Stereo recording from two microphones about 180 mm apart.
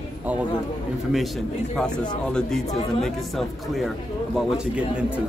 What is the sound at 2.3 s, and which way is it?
Speech, 5° left (ahead or behind).